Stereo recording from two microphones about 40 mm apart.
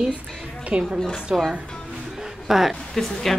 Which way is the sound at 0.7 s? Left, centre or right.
Right.